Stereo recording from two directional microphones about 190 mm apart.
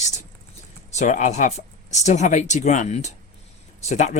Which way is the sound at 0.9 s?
40° left (ahead or behind).